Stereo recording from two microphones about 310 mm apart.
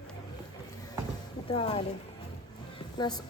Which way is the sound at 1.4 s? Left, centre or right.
Centre.